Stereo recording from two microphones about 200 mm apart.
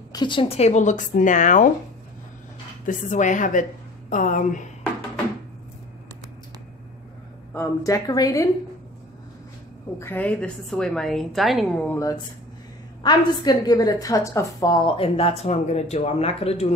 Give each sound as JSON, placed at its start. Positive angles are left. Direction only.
{"t": 0.1, "sound": "speech", "side_deg": 25}
{"t": 2.9, "sound": "speech", "side_deg": 40}
{"t": 7.5, "sound": "a woman's voice", "side_deg": 15}
{"t": 9.9, "sound": "a woman's voice", "side_deg": 10}
{"t": 13.0, "sound": "a woman's voice", "side_deg": 20}